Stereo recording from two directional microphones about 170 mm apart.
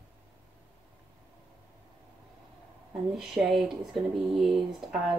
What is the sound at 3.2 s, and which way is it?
Speech, centre (ahead or behind).